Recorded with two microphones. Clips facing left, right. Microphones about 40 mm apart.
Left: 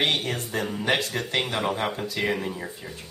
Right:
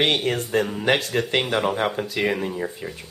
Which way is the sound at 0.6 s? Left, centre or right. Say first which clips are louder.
Right 3 dB; right.